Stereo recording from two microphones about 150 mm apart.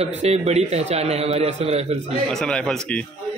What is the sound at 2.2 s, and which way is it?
Speech, 5° left (ahead or behind).